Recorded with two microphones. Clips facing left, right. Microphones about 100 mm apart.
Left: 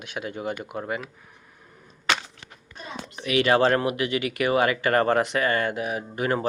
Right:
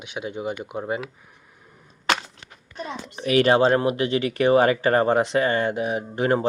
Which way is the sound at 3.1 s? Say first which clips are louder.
Right 4 dB; 40° right (ahead or behind).